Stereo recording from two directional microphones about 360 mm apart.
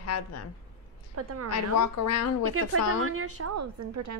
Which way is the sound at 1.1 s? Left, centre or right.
Right.